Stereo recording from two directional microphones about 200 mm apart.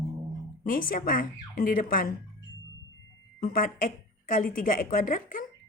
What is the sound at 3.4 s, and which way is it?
A woman's voice, 45° left (ahead or behind).